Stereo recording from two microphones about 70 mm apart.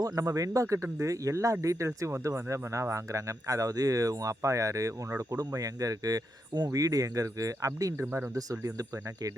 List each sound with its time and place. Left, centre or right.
0.0 s speech: right
6.7 s speech: right